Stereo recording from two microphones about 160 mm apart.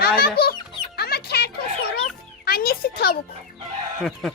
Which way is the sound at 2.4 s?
70° left (ahead or behind).